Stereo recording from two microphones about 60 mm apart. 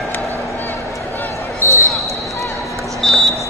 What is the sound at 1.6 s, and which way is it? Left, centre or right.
Basketball bounce, left.